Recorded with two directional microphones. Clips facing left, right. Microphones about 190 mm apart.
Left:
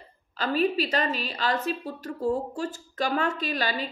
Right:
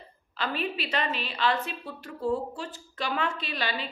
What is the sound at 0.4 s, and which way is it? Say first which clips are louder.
A woman's voice: left 7 dB; 40° left (ahead or behind).